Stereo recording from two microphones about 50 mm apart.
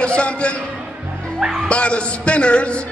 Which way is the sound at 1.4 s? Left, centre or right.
Centre.